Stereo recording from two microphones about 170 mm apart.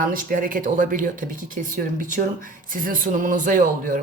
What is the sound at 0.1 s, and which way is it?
Speech, 55° right (ahead or behind).